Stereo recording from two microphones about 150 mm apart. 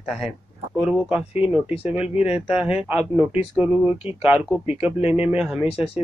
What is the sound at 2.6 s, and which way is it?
Speech, 5° right (ahead or behind).